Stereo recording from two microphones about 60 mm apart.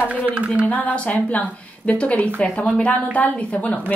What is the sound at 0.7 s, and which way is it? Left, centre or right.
Speech, left.